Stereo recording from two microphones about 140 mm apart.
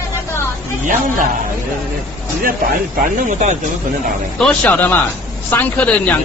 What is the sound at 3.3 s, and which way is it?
Speech, 60° right (ahead or behind).